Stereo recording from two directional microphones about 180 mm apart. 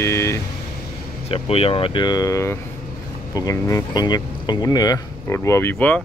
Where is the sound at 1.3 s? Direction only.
30° left (ahead or behind).